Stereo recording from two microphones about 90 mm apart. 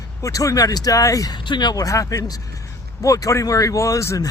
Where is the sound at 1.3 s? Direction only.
60° left (ahead or behind).